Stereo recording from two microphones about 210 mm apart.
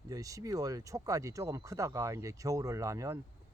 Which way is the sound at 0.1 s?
15° right (ahead or behind).